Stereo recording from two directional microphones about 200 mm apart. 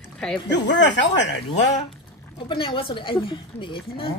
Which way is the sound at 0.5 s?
60° left (ahead or behind).